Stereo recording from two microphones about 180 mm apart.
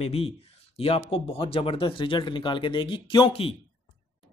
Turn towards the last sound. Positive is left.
turn(degrees=30)  # may be behind; listen again after turning